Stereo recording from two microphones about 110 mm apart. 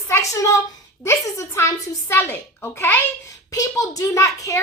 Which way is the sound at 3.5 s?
30° left (ahead or behind).